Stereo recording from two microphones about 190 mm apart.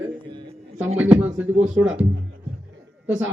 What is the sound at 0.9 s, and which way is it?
Speech, 10° right (ahead or behind).